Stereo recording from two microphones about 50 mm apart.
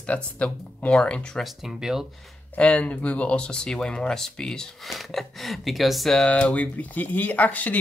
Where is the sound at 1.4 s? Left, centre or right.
Centre.